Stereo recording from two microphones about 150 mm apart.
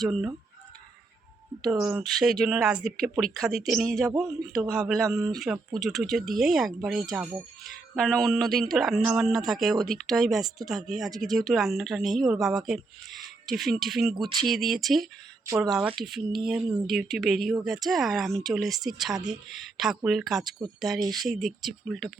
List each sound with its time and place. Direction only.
0.0 s speech: centre (ahead or behind)
1.6 s speech: 5° right (ahead or behind)
21.0 s speech: 25° right (ahead or behind)
21.2 s speech: centre (ahead or behind)